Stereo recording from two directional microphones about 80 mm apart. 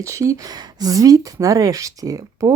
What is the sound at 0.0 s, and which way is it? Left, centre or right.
A woman's voice, right.